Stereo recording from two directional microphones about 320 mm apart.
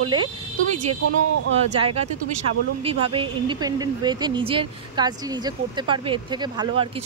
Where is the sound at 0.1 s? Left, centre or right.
Centre.